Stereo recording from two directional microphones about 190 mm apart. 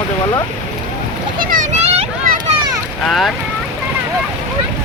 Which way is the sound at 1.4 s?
45° right (ahead or behind).